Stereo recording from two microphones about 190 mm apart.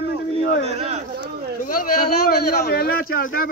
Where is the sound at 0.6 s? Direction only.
35° right (ahead or behind).